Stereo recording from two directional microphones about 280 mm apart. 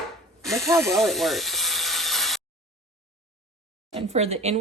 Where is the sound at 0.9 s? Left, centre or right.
Centre.